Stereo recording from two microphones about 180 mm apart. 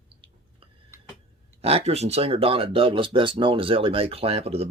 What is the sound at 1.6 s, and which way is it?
Speech, 35° right (ahead or behind).